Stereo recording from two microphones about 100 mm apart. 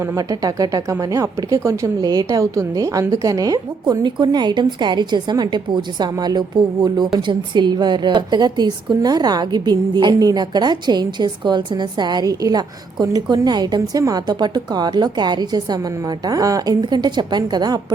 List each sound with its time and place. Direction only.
0.0 s a woman's voice: 35° right (ahead or behind)